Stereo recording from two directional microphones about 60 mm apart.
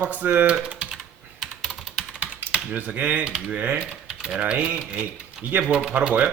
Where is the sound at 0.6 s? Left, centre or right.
Centre.